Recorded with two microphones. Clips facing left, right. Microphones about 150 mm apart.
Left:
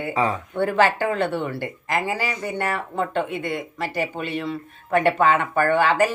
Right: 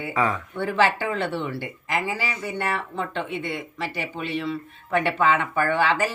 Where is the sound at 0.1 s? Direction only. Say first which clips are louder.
Left 1 dB; 30° left (ahead or behind).